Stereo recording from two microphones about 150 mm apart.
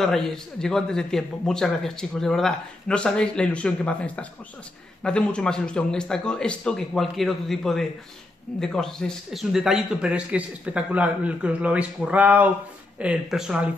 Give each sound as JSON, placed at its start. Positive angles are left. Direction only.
{"t": 0.0, "sound": "a man's voice", "side_deg": 5}